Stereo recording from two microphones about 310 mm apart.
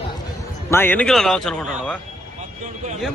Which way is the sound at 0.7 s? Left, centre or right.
Centre.